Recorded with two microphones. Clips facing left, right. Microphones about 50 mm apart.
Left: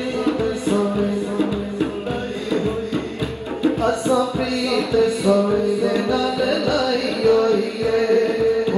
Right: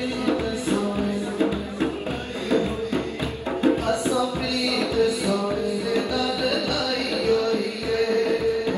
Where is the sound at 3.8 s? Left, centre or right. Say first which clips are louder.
Left 5 dB; left.